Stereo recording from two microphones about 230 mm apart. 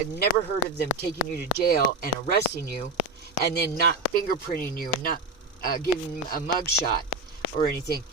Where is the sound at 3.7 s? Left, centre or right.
Left.